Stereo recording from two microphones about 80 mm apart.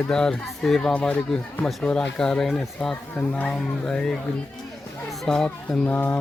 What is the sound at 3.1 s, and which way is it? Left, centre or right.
Speech, centre.